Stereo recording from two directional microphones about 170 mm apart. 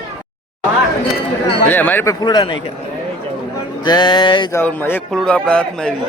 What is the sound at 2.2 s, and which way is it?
Speech, 25° left (ahead or behind).